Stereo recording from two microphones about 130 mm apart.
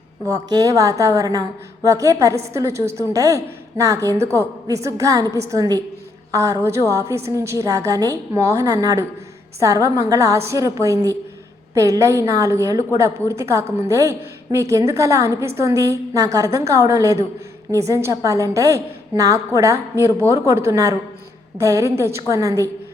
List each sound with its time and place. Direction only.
0.3 s a woman's voice: 30° right (ahead or behind)